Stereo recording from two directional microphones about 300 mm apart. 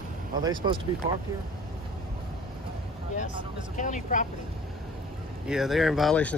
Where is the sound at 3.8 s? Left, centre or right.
Left.